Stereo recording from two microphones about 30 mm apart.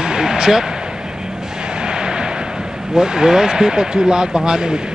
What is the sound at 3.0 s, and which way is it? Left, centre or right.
Speech, right.